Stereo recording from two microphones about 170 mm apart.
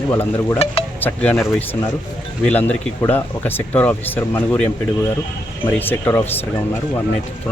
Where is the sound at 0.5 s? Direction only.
35° left (ahead or behind).